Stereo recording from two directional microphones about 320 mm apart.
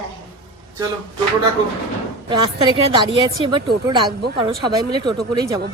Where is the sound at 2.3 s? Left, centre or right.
Centre.